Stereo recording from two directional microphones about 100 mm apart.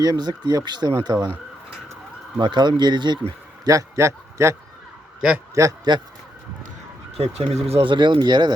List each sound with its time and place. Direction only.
0.0 s speech: 45° right (ahead or behind)
2.4 s speech: 50° right (ahead or behind)
3.6 s a man's voice: 35° right (ahead or behind)
5.6 s speech: 30° right (ahead or behind)
7.2 s speech: 90° right
7.9 s speech: 55° right (ahead or behind)